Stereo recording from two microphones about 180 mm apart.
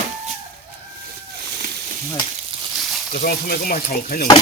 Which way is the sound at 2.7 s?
Centre (ahead or behind).